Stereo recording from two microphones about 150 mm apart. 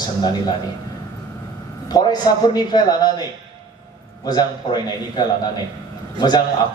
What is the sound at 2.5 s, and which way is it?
Speech, 25° left (ahead or behind).